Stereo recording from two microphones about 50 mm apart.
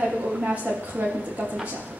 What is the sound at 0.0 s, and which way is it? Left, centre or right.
A woman's voice, right.